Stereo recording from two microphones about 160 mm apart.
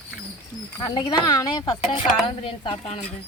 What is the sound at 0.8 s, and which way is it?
A woman's voice, 25° left (ahead or behind).